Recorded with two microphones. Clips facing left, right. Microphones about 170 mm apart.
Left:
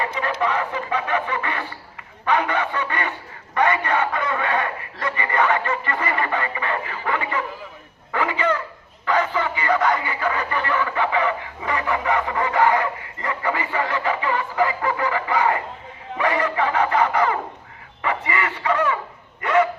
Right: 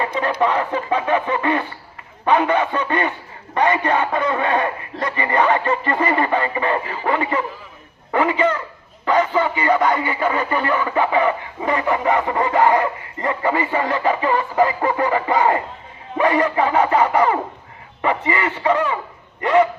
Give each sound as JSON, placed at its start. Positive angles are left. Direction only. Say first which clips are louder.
{"t": 0.0, "sound": "a man's voice", "louder": "right 4 dB", "side_deg": -35}
{"t": 10.7, "sound": "a man's voice", "louder": "right 2 dB", "side_deg": -40}
{"t": 19.4, "sound": "a sound", "louder": "right 4 dB", "side_deg": -20}